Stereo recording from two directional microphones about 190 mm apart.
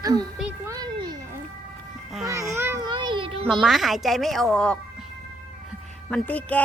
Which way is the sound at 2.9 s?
25° right (ahead or behind).